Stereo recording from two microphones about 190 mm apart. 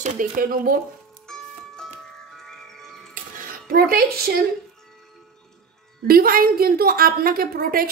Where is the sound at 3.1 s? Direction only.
50° right (ahead or behind).